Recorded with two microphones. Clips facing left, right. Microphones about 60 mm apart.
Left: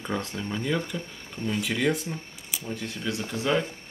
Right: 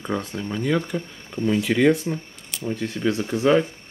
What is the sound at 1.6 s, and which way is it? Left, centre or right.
Speech, right.